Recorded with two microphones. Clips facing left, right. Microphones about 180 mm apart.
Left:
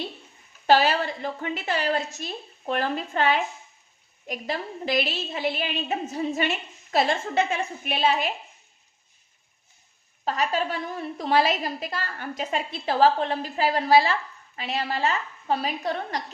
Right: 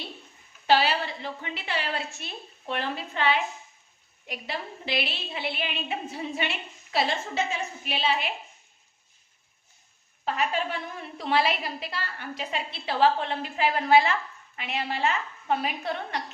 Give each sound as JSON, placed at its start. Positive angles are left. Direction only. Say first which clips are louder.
{"t": 0.7, "sound": "a woman's voice", "louder": "left 3 dB", "side_deg": 45}
{"t": 10.2, "sound": "a woman's voice", "louder": "left 2 dB", "side_deg": 40}